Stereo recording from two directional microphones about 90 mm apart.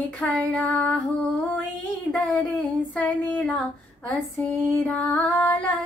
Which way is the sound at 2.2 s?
15° left (ahead or behind).